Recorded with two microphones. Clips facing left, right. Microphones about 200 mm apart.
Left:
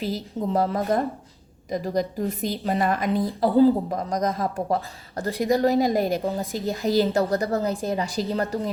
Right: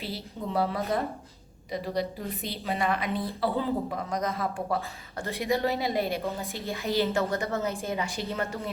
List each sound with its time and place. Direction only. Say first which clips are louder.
0.0 s a woman's voice: left 8 dB; 45° left (ahead or behind)